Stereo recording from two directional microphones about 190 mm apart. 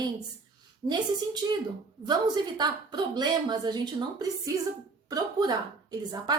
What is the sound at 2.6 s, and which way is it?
A woman's voice, 20° right (ahead or behind).